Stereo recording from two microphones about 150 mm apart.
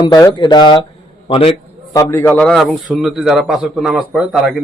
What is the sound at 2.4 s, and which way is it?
A man's voice, centre (ahead or behind).